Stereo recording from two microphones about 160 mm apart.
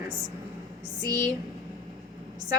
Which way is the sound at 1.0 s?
25° right (ahead or behind).